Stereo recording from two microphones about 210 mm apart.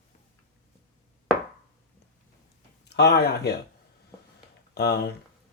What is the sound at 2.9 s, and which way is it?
Speech, 50° left (ahead or behind).